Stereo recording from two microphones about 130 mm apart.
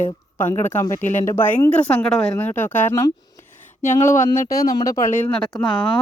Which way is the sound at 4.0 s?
90° left.